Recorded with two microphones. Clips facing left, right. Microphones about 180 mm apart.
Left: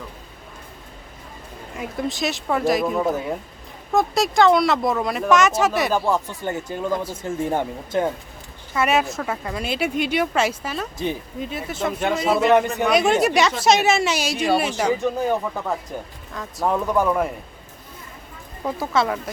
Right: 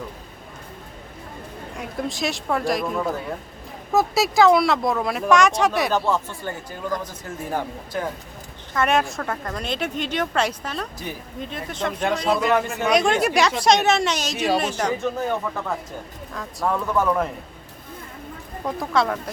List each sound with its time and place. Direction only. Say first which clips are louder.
1.7 s speech: left 2 dB; centre (ahead or behind)
3.0 s speech: left 4 dB; 20° left (ahead or behind)
3.9 s speech: even; centre (ahead or behind)
6.1 s speech: left 2 dB; 15° left (ahead or behind)
8.7 s speech: left 1 dB; 5° left (ahead or behind)
10.9 s speech: left 7 dB; 25° left (ahead or behind)
11.3 s speech: left 2 dB; 5° left (ahead or behind)
16.3 s speech: left 2 dB; centre (ahead or behind)
16.6 s speech: left 2 dB; 15° left (ahead or behind)
18.6 s speech: left 1 dB; 5° left (ahead or behind)